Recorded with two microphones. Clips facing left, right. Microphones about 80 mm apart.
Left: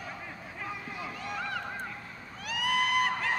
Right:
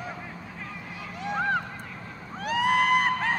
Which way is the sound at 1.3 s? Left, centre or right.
Right.